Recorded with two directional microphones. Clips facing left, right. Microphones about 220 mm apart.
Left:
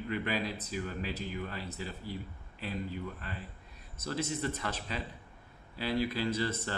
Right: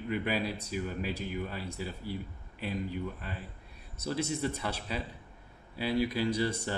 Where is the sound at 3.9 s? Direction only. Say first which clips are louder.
Right 2 dB; 10° right (ahead or behind).